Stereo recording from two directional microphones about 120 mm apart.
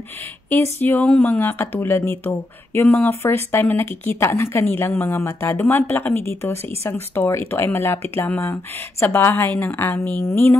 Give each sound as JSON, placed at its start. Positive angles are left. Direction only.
{"t": 0.5, "sound": "a woman's voice", "side_deg": 15}